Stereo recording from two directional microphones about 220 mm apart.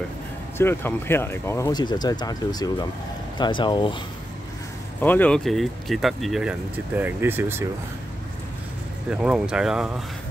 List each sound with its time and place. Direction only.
0.6 s speech: 10° left (ahead or behind)
5.0 s speech: 5° left (ahead or behind); by 7.6 s 10° right (ahead or behind)
9.1 s speech: 5° right (ahead or behind)